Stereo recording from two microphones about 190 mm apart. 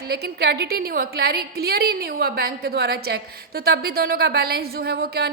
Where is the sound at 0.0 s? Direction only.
55° right (ahead or behind).